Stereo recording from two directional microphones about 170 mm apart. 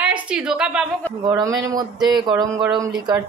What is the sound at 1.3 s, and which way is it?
Speech, 20° right (ahead or behind).